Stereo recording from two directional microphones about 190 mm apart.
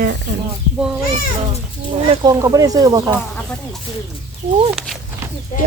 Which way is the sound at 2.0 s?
20° right (ahead or behind).